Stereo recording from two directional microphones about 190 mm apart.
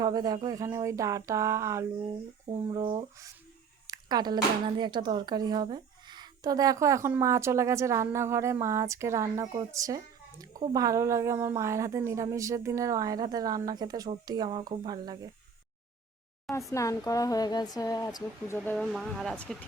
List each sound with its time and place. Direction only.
0.0 s speech: 20° right (ahead or behind)
2.5 s speech: 25° right (ahead or behind)
16.5 s a woman's voice: 15° left (ahead or behind)
18.9 s speech: centre (ahead or behind)